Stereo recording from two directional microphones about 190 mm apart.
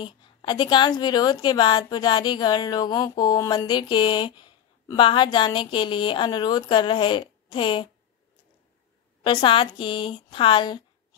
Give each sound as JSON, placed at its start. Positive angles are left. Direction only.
{"t": 0.0, "sound": "a woman's voice", "side_deg": 25}
{"t": 9.2, "sound": "a woman's voice", "side_deg": 25}